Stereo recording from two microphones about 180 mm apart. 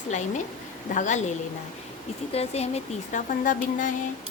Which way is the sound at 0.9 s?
45° left (ahead or behind).